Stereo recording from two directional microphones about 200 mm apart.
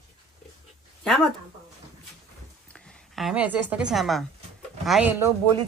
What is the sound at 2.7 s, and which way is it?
A woman's voice, centre (ahead or behind).